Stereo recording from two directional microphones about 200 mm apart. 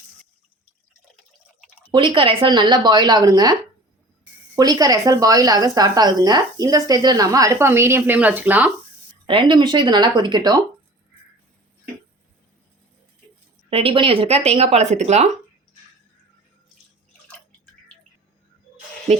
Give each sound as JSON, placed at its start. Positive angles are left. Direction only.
{"t": 1.9, "sound": "speech", "side_deg": -25}
{"t": 9.2, "sound": "speech", "side_deg": -25}
{"t": 13.7, "sound": "speech", "side_deg": -25}